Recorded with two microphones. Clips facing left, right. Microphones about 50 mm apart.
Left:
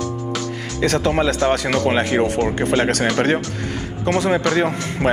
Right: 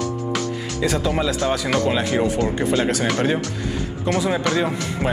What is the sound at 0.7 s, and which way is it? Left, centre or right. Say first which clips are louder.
A man's voice: left 4 dB; left.